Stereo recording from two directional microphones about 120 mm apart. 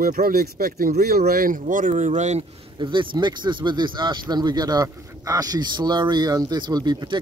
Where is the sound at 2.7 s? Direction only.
40° right (ahead or behind).